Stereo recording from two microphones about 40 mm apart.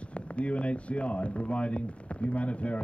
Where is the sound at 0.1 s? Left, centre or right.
Left.